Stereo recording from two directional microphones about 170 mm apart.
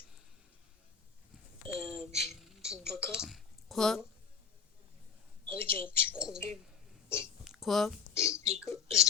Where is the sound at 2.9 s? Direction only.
15° left (ahead or behind).